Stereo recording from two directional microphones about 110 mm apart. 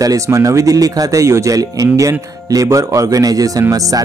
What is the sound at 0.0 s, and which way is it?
Speech, 30° right (ahead or behind).